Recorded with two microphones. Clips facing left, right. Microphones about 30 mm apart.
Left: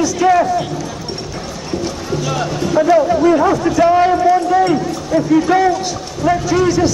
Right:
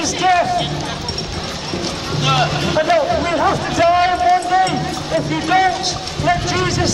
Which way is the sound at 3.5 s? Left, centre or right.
Right.